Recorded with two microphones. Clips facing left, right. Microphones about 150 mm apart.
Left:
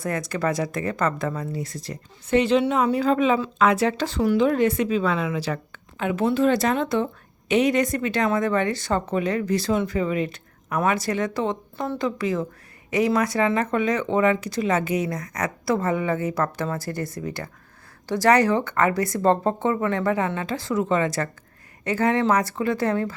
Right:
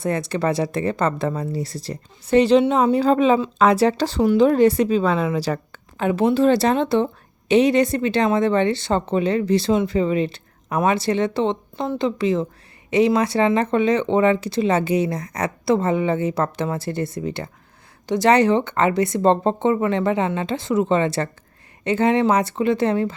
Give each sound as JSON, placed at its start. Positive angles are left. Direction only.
{"t": 0.0, "sound": "speech", "side_deg": -25}